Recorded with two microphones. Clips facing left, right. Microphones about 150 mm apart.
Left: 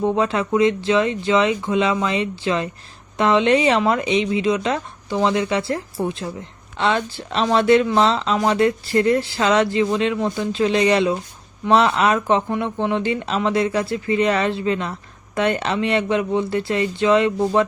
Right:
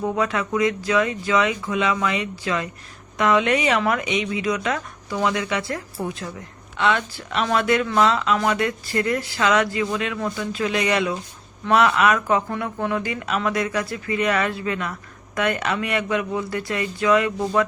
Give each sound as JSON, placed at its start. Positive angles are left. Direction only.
{"t": 0.0, "sound": "speech", "side_deg": 30}